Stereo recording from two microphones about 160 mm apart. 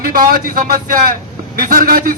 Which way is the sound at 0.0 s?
60° right (ahead or behind).